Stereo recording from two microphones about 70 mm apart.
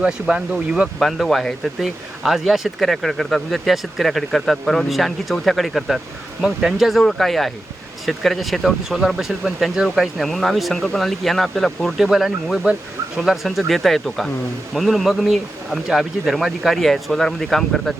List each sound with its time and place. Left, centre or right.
0.0 s speech: centre
0.9 s speech: centre